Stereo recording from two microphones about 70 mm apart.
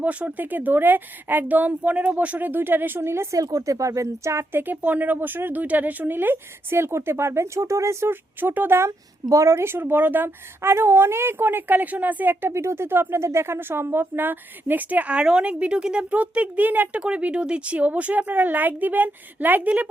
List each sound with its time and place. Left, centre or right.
0.0 s a woman's voice: centre; by 3.2 s right
3.3 s speech: right
4.6 s speech: right
9.3 s a woman's voice: right